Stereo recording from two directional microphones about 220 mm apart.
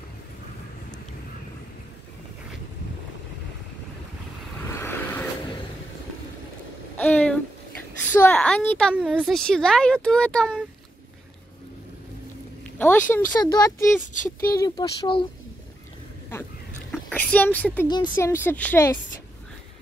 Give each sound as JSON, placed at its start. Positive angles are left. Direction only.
{"t": 4.6, "sound": "vehicle", "side_deg": 10}
{"t": 7.0, "sound": "a sound", "side_deg": 5}
{"t": 8.1, "sound": "speech", "side_deg": 10}
{"t": 12.7, "sound": "speech", "side_deg": 5}
{"t": 13.4, "sound": "speech", "side_deg": 20}
{"t": 16.9, "sound": "a woman's voice", "side_deg": 5}
{"t": 17.8, "sound": "speech", "side_deg": 20}